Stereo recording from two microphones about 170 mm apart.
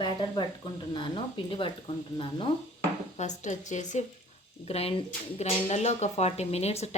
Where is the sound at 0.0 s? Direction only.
25° left (ahead or behind).